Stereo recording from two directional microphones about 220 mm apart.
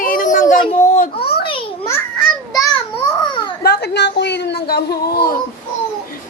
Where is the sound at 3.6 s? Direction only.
50° left (ahead or behind).